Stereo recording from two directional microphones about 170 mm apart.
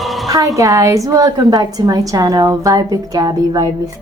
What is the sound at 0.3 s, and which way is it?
A woman's voice, 20° right (ahead or behind).